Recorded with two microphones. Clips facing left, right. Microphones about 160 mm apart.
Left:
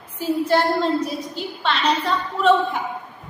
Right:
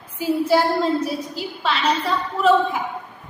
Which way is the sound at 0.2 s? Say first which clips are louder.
Right 1 dB; 10° right (ahead or behind).